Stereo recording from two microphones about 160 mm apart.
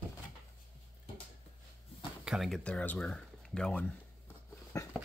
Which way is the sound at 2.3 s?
Centre (ahead or behind).